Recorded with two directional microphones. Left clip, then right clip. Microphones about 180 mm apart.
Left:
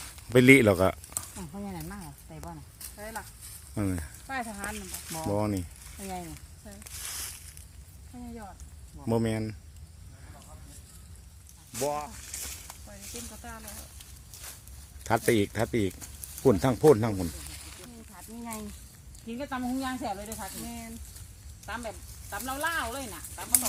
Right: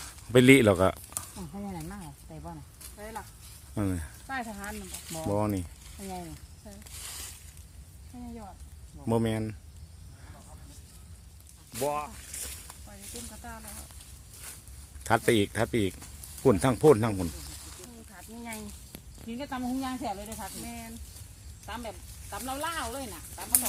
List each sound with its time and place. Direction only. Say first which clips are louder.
0.3 s snake: left 1 dB; centre (ahead or behind)
3.0 s horse: left 1 dB; 25° left (ahead or behind)
3.8 s speech: even; centre (ahead or behind)
9.0 s speech: even; centre (ahead or behind)
11.8 s speech: even; centre (ahead or behind)
12.1 s a sound: left 2 dB; 40° left (ahead or behind)
15.0 s speech: right 1 dB; centre (ahead or behind)
19.4 s speech: left 1 dB; 10° left (ahead or behind)
20.7 s speech: even; 70° left (ahead or behind)
21.7 s speech: left 2 dB; 5° left (ahead or behind)